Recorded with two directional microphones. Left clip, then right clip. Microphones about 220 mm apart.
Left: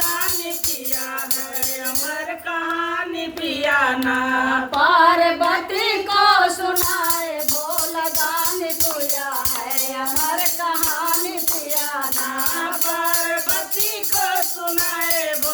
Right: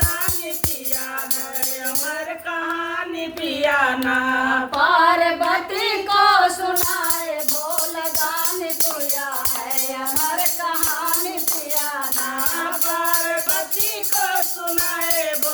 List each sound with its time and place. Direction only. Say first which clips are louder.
3.4 s carnatic music: even; 10° right (ahead or behind)
4.8 s child singing: left 2 dB; 15° left (ahead or behind)
10.3 s music: left 1 dB; 15° left (ahead or behind)